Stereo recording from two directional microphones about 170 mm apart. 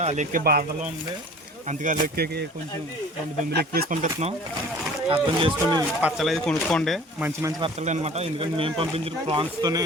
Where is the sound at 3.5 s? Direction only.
60° right (ahead or behind).